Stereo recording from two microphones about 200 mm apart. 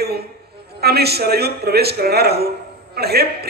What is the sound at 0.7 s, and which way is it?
A man's voice, 50° right (ahead or behind).